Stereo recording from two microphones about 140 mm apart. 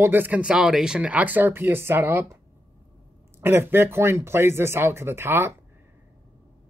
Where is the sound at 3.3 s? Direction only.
15° right (ahead or behind).